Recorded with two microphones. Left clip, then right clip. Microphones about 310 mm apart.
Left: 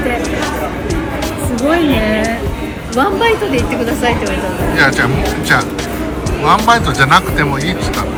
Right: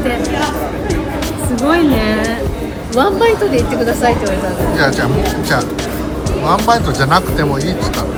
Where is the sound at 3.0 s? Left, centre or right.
Right.